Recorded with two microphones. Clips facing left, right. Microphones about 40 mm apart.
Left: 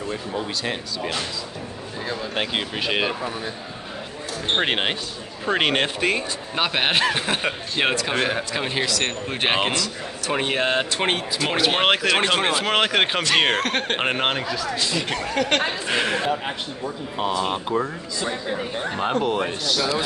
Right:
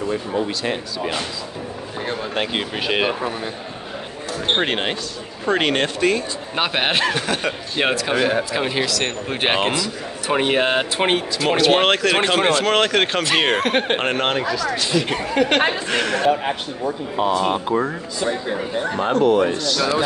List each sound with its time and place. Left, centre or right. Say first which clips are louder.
0.4 s speech: right 4 dB; centre
2.3 s speech: right 1 dB; centre
4.6 s speech: right 1 dB; centre
6.5 s speech: right 1 dB; centre
7.2 s speech: right 2 dB; centre
7.7 s speech: right 3 dB; centre
10.3 s speech: right 4 dB; centre
11.3 s speech: right 6 dB; centre
13.2 s speech: right 2 dB; centre
13.9 s speech: right 2 dB; centre
15.2 s speech: right 3 dB; centre
15.9 s a man's voice: right 2 dB; centre
17.3 s speech: right 4 dB; centre
18.6 s speech: right 3 dB; centre